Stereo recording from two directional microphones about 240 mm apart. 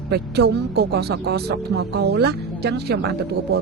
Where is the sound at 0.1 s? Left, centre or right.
Right.